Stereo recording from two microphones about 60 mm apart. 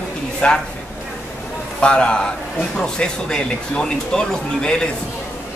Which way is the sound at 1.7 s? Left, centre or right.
Centre.